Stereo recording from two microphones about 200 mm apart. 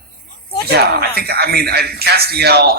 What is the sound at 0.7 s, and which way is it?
A man's voice, 50° right (ahead or behind).